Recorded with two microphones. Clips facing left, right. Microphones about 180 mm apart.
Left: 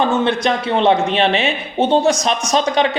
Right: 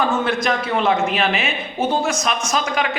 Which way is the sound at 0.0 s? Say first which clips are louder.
Left 4 dB; 30° left (ahead or behind).